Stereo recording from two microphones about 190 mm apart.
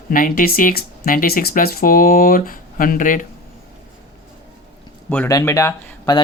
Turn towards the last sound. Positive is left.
turn(degrees=15)  # may be behind; listen again after turning